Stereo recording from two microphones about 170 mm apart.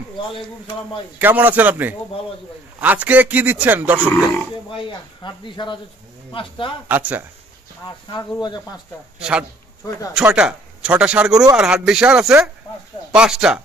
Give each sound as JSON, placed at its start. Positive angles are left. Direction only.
{"t": 1.2, "sound": "speech", "side_deg": -10}
{"t": 5.2, "sound": "speech", "side_deg": 25}
{"t": 6.9, "sound": "speech", "side_deg": -10}
{"t": 8.1, "sound": "speech", "side_deg": 25}
{"t": 9.2, "sound": "speech", "side_deg": -5}